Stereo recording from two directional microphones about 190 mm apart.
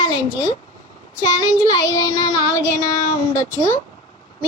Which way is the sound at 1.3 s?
20° left (ahead or behind).